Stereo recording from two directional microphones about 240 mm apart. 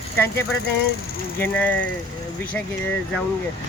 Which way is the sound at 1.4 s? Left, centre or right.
Centre.